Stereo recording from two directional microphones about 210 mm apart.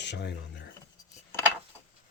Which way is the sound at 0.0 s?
55° left (ahead or behind).